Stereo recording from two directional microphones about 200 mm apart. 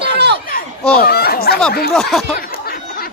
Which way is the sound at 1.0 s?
50° left (ahead or behind).